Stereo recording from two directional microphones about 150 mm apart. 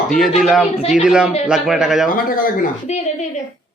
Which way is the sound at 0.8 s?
55° left (ahead or behind).